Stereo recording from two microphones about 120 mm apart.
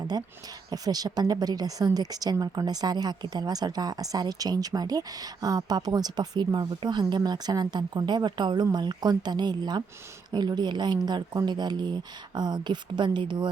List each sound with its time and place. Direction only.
0.7 s a woman's voice: 30° right (ahead or behind)